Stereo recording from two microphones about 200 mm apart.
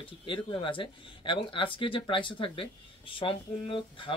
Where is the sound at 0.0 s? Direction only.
25° left (ahead or behind).